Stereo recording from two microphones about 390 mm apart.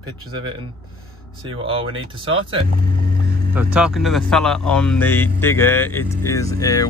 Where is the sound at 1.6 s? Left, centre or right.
Centre.